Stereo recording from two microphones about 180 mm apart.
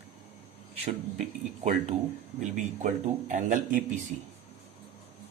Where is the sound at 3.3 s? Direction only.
45° right (ahead or behind).